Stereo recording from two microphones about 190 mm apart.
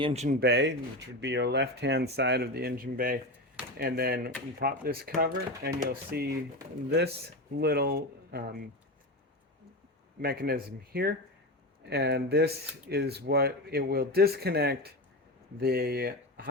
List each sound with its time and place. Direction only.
0.0 s speech: 35° right (ahead or behind)
0.3 s speech: 65° right (ahead or behind)
7.6 s speech: 55° right (ahead or behind)
10.2 s speech: 55° right (ahead or behind)